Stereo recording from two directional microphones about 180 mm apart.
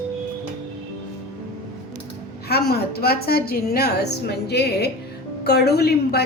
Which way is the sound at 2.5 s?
60° left (ahead or behind).